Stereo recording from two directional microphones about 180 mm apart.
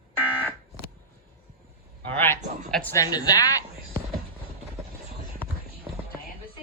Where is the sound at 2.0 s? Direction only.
10° left (ahead or behind).